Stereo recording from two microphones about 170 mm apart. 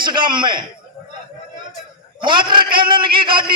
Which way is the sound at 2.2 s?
30° right (ahead or behind).